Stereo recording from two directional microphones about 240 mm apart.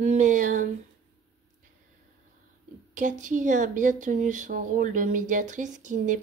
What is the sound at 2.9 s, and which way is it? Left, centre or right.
Speech, right.